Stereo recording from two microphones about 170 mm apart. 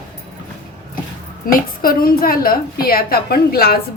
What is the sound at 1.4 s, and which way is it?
A woman's voice, 60° left (ahead or behind).